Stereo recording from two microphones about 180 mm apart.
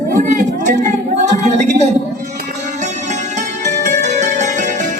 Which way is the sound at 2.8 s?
40° right (ahead or behind).